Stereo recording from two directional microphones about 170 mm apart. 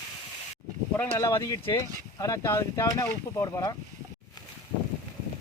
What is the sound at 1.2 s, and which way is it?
Speech, 20° left (ahead or behind).